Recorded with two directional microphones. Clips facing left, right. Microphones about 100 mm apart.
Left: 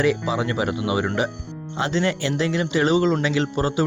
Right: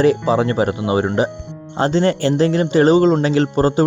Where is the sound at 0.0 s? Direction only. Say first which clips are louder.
Right 7 dB; 40° right (ahead or behind).